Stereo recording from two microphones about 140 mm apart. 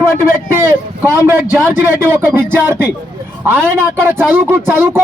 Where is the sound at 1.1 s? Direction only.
20° right (ahead or behind).